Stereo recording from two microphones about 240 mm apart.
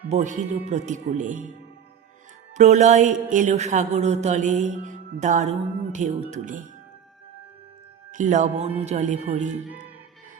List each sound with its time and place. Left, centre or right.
0.7 s speech: right
2.6 s speech: right
8.1 s speech: right